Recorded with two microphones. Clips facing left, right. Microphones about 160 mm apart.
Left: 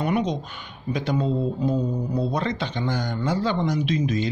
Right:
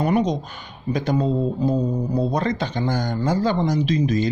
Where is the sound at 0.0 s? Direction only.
40° right (ahead or behind).